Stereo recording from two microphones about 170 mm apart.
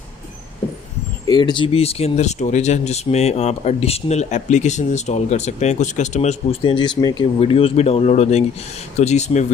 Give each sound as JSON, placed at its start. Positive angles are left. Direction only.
{"t": 1.2, "sound": "speech", "side_deg": 25}
{"t": 7.3, "sound": "speech", "side_deg": 35}